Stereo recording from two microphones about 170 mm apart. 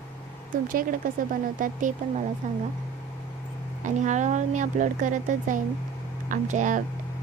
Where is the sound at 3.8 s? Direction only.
45° right (ahead or behind).